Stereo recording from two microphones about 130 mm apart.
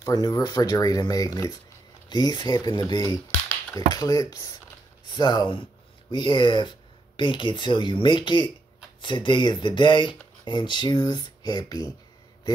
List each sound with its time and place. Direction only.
0.0 s speech: 30° left (ahead or behind)